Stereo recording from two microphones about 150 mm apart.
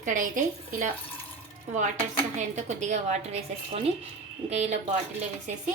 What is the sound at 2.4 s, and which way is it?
A woman's voice, 50° right (ahead or behind).